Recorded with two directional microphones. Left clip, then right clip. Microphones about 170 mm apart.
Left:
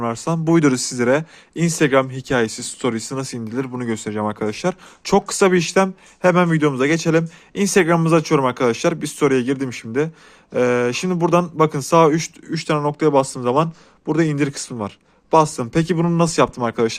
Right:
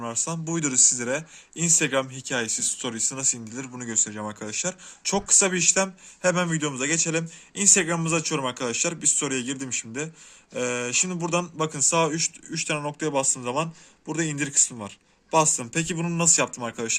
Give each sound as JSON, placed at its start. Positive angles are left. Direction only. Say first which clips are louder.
{"t": 0.0, "sound": "speech", "louder": "left 9 dB", "side_deg": 45}